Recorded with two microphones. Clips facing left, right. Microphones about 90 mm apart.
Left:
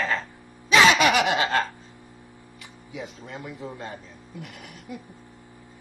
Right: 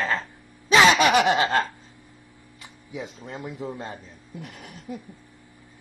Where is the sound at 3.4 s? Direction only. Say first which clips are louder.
Right 3 dB; 20° right (ahead or behind).